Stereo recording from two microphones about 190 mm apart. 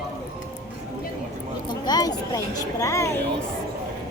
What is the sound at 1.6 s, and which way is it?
Speech, 20° left (ahead or behind).